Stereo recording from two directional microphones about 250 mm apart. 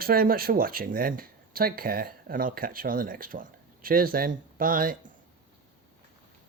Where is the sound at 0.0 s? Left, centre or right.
Right.